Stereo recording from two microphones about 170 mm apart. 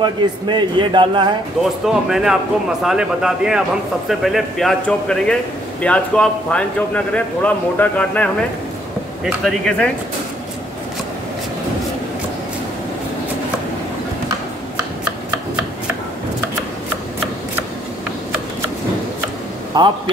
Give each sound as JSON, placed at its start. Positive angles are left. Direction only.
{"t": 0.0, "sound": "a man's voice", "side_deg": -25}
{"t": 1.6, "sound": "a man's voice", "side_deg": 0}
{"t": 19.7, "sound": "a man's voice", "side_deg": -25}